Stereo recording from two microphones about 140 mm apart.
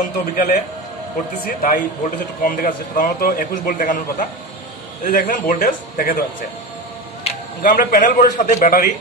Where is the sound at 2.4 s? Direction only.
80° left.